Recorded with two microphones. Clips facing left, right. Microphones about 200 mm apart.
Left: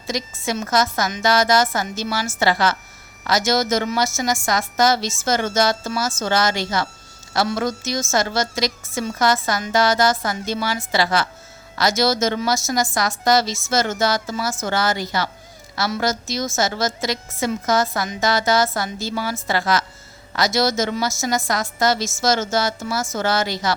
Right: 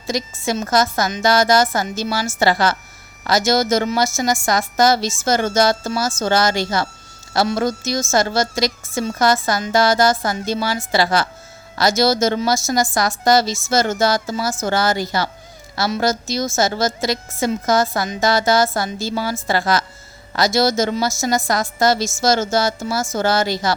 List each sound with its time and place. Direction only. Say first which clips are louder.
0.1 s a woman's voice: right 3 dB; 30° right (ahead or behind)